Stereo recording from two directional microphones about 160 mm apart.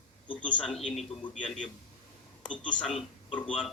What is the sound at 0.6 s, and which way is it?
Speech, centre (ahead or behind).